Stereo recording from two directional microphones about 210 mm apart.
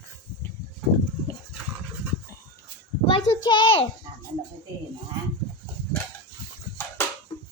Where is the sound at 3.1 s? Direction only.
25° left (ahead or behind).